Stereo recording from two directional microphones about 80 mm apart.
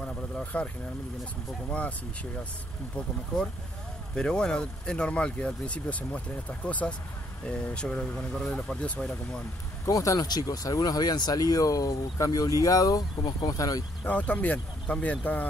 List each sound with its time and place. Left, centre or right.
0.0 s vehicle: centre
1.7 s speech: centre
4.1 s speech: centre
9.8 s speech: left
14.0 s speech: centre